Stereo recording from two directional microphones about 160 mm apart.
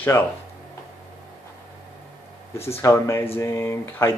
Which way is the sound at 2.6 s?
15° left (ahead or behind).